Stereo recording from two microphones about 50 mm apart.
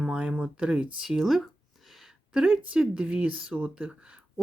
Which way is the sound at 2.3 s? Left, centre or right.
Centre.